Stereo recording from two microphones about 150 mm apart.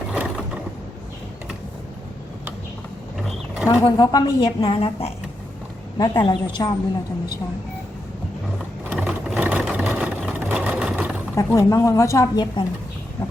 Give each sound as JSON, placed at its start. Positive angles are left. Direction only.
{"t": 0.1, "sound": "mechanisms", "side_deg": -10}
{"t": 3.7, "sound": "a woman's voice", "side_deg": 25}
{"t": 6.0, "sound": "a woman's voice", "side_deg": 30}
{"t": 8.9, "sound": "vehicle", "side_deg": -5}
{"t": 11.3, "sound": "a woman's voice", "side_deg": 20}